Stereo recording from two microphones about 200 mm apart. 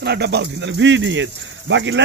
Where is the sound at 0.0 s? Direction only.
55° right (ahead or behind).